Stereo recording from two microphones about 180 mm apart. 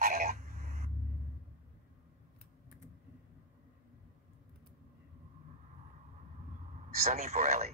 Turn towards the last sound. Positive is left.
turn(degrees=-45)  # may be behind; listen again after turning